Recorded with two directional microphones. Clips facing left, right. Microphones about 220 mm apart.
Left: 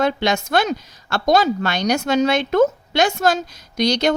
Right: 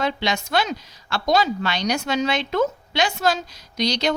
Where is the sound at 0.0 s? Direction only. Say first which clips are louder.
Left 5 dB; 45° left (ahead or behind).